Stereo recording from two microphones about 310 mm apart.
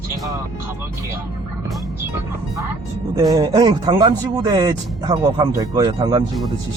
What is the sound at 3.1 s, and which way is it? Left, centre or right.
Speech, centre.